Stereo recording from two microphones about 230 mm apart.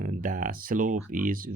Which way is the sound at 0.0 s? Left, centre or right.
Right.